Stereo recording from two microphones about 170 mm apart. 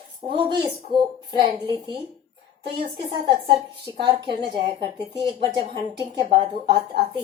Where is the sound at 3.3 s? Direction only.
25° right (ahead or behind).